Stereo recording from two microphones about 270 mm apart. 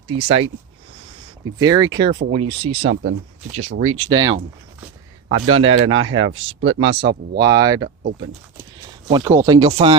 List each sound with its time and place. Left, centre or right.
0.1 s speech: right
1.5 s speech: centre
2.9 s speech: right
3.8 s speech: right
5.3 s speech: right
6.0 s speech: right
7.3 s speech: centre
9.0 s speech: centre